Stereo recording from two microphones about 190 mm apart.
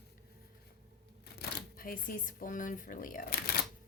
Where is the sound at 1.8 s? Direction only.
45° left (ahead or behind).